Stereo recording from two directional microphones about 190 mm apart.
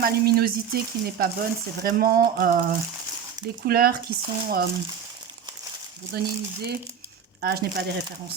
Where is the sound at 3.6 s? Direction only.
55° right (ahead or behind).